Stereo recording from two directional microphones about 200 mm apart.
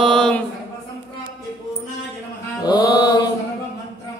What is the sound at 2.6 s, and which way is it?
Mantra, 20° left (ahead or behind).